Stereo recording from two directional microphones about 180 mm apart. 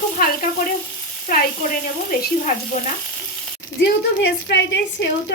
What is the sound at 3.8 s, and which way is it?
A woman's voice, 85° left.